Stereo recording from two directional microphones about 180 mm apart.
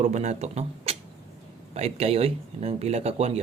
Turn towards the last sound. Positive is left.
turn(degrees=-35)  # may be behind; listen again after turning